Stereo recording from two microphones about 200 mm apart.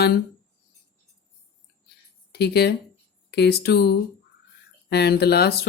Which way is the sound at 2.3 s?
55° left (ahead or behind).